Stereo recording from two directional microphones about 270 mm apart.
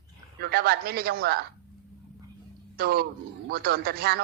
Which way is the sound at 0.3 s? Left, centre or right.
Right.